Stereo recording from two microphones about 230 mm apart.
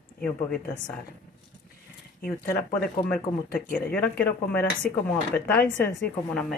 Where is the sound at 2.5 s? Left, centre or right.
Centre.